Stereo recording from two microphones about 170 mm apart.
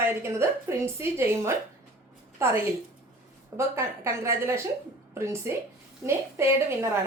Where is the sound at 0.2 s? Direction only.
15° right (ahead or behind).